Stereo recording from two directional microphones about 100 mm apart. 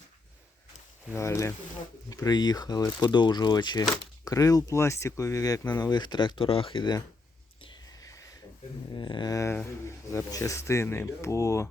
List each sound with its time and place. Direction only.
1.1 s speech: 30° left (ahead or behind); by 7.0 s 50° left (ahead or behind)
7.9 s a sound: 35° left (ahead or behind)
9.0 s speech: 50° left (ahead or behind)
9.3 s speech: 30° left (ahead or behind)